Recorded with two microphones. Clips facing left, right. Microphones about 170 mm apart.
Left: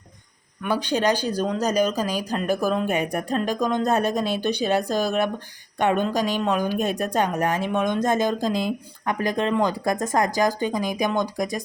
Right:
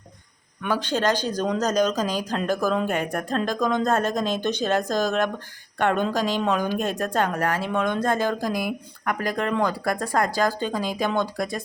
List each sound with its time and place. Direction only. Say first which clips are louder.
0.6 s speech: left 1 dB; 15° left (ahead or behind)